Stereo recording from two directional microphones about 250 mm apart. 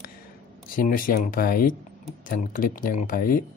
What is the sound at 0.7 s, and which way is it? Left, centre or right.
Speech, left.